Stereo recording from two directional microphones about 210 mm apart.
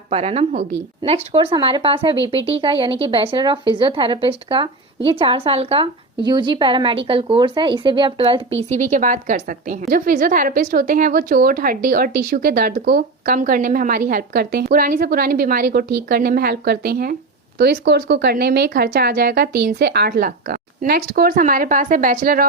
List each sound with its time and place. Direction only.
0.1 s a woman's voice: 30° right (ahead or behind)
8.7 s a woman's voice: 35° right (ahead or behind)